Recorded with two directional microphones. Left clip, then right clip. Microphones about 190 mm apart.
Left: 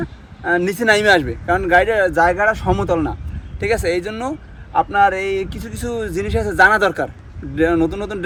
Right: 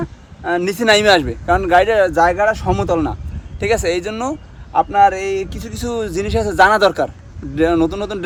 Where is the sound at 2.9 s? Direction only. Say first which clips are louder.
Right 1 dB; 20° right (ahead or behind).